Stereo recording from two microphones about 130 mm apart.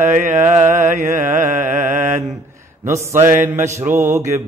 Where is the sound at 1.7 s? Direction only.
70° right (ahead or behind).